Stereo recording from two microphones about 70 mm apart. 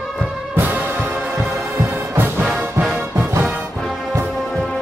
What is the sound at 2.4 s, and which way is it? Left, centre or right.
Music, centre.